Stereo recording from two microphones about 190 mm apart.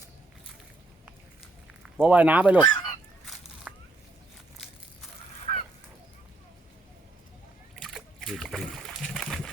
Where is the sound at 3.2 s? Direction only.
Centre (ahead or behind).